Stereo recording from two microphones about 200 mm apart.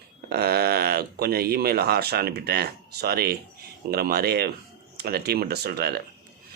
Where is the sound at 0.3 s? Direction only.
50° right (ahead or behind).